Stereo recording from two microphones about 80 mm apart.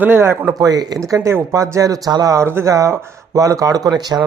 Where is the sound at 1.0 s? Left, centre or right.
Right.